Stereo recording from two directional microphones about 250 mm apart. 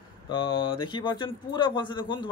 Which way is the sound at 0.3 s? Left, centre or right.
Centre.